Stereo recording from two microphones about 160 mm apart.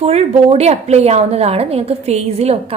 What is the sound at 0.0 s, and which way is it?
A woman's voice, 40° right (ahead or behind).